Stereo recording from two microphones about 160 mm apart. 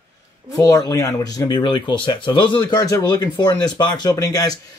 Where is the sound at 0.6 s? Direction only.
20° left (ahead or behind).